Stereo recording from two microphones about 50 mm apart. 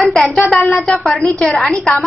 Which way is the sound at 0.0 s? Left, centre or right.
Centre.